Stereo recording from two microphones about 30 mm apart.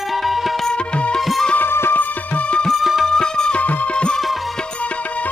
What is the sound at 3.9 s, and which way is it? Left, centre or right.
Music, left.